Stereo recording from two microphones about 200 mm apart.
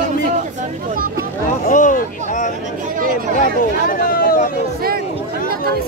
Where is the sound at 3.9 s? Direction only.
45° left (ahead or behind).